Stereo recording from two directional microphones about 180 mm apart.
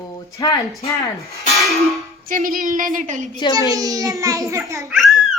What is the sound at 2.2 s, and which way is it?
Speech, 50° right (ahead or behind).